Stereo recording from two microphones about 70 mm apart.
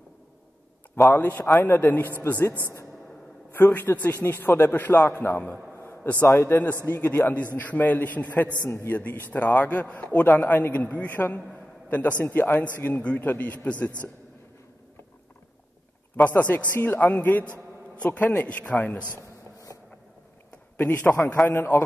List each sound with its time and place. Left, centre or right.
1.1 s a man's voice: left
3.5 s a man's voice: left
5.7 s a sound: left
6.9 s a man's voice: left
8.6 s a man's voice: left
8.9 s a man's voice: left
16.3 s a man's voice: left
20.7 s a man's voice: left